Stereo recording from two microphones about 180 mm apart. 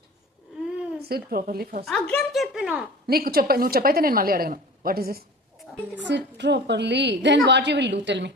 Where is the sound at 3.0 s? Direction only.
60° right (ahead or behind).